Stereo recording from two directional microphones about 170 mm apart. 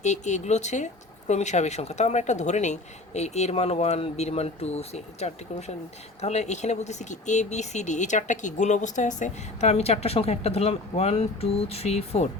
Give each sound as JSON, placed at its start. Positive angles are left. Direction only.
{"t": 0.0, "sound": "speech", "side_deg": 45}